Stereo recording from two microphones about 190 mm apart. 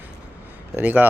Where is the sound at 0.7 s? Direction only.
10° right (ahead or behind).